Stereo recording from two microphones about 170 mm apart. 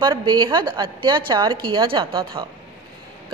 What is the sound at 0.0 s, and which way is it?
A woman's voice, 25° right (ahead or behind).